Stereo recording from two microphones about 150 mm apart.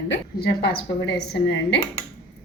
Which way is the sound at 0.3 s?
90° left.